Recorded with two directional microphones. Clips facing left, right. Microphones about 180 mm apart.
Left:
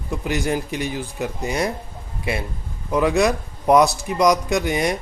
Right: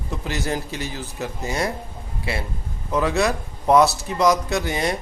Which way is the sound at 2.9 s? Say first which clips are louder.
Left 3 dB; 15° left (ahead or behind).